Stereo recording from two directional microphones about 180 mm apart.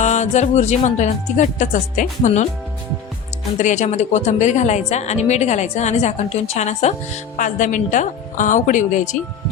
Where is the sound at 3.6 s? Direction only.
40° left (ahead or behind).